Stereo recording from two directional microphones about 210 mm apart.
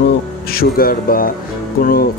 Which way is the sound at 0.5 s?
45° left (ahead or behind).